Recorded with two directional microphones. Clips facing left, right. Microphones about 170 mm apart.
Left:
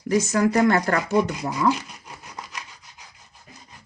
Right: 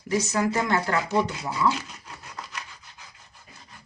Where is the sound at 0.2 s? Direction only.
50° left (ahead or behind).